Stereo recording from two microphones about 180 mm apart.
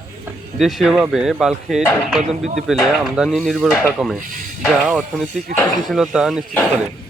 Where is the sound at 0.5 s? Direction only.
Centre (ahead or behind).